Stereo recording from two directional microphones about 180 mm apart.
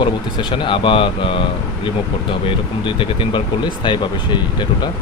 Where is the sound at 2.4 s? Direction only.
30° left (ahead or behind).